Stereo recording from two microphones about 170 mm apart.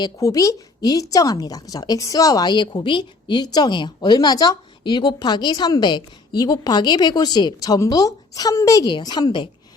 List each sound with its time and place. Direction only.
0.0 s a woman's voice: 20° left (ahead or behind)